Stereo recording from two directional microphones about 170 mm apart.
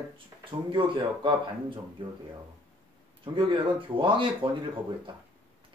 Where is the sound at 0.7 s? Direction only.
30° right (ahead or behind).